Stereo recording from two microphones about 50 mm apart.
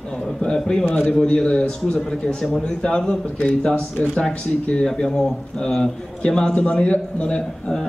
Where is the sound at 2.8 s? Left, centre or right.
Centre.